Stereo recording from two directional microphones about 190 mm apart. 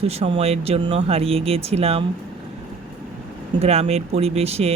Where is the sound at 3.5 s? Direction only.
35° right (ahead or behind).